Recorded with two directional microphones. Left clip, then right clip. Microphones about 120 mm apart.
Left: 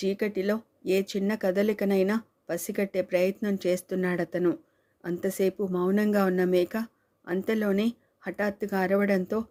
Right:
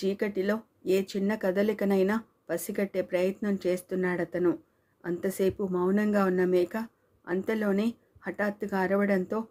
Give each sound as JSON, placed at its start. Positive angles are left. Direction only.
{"t": 0.0, "sound": "speech", "side_deg": 25}